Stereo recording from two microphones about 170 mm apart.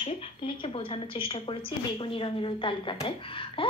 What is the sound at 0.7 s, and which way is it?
A woman's voice, 30° left (ahead or behind).